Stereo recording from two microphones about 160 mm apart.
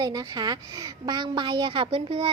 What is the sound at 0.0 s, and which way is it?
A woman's voice, 25° right (ahead or behind).